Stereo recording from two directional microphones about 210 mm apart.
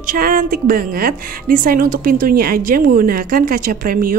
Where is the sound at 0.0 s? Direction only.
45° right (ahead or behind).